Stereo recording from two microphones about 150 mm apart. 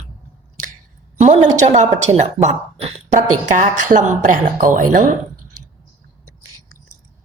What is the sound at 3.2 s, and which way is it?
A woman's voice, 65° right (ahead or behind).